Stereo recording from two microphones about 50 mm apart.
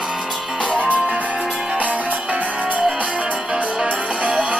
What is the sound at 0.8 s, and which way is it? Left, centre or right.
Music, right.